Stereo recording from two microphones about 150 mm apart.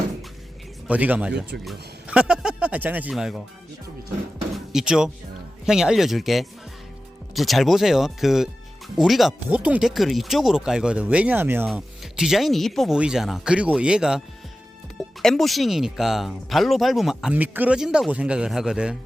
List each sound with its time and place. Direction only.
0.9 s speech: 10° right (ahead or behind)
4.5 s speech: 5° right (ahead or behind)
11.7 s speech: centre (ahead or behind)
15.2 s speech: centre (ahead or behind)